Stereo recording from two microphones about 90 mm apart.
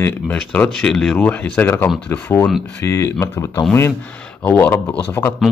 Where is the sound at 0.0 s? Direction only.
20° left (ahead or behind).